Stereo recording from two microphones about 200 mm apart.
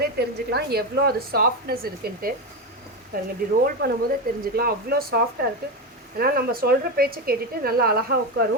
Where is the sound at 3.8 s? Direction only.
50° right (ahead or behind).